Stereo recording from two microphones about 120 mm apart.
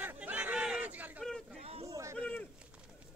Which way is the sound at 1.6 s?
55° right (ahead or behind).